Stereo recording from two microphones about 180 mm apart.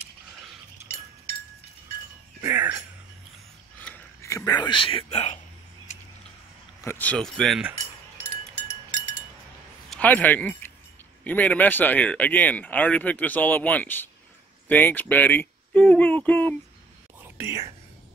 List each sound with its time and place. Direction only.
2.4 s speech: 10° right (ahead or behind)
3.8 s speech: 15° left (ahead or behind); by 5.4 s 40° left (ahead or behind)
6.8 s speech: 10° left (ahead or behind)
9.8 s speech: 10° left (ahead or behind)
17.2 s whispering: 15° right (ahead or behind)